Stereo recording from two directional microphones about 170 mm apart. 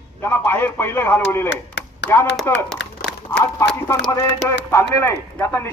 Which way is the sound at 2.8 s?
90° left.